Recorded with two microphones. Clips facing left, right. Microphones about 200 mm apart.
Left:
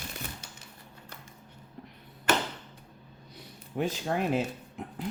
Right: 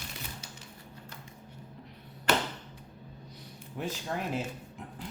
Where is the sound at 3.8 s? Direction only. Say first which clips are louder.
Left 6 dB; 80° left.